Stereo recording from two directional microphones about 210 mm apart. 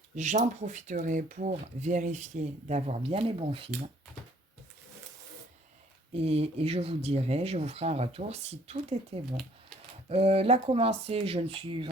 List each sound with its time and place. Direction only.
0.2 s speech: 35° right (ahead or behind)
6.1 s speech: 30° right (ahead or behind)